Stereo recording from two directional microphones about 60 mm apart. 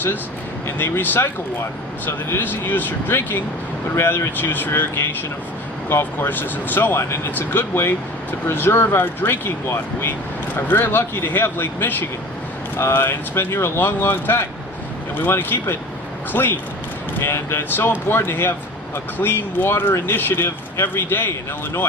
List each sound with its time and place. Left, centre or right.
0.8 s speech: left